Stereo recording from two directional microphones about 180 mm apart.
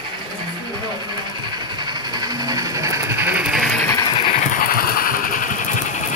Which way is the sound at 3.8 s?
15° left (ahead or behind).